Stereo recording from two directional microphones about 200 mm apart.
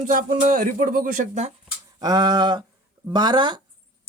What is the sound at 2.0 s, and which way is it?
Speech, 20° right (ahead or behind).